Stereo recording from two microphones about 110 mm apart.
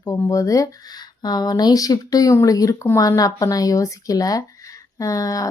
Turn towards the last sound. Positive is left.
turn(degrees=30)  # may be behind; listen again after turning